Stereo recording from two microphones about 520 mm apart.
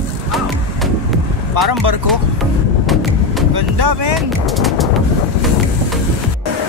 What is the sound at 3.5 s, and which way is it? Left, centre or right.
Speech, right.